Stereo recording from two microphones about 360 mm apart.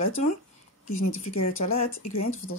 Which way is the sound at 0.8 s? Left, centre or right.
Left.